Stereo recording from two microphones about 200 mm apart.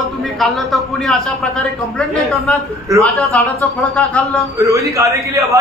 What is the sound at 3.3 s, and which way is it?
A man's voice, 5° left (ahead or behind).